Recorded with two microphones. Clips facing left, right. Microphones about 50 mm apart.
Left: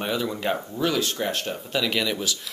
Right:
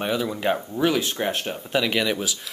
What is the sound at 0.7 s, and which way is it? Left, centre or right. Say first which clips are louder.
Speech: right 2 dB; centre.